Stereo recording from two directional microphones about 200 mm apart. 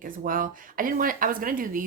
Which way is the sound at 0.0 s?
45° right (ahead or behind).